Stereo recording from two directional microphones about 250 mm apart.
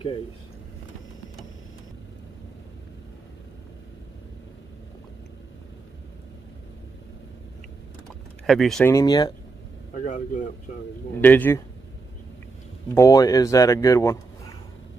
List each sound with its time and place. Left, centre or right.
8.5 s speech: centre
9.9 s speech: left
11.1 s speech: centre
12.9 s speech: centre